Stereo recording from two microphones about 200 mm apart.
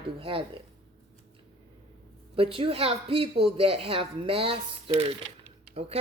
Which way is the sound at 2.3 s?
25° right (ahead or behind).